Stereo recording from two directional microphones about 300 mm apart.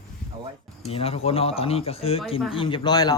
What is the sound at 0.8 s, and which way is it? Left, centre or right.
Speech, centre.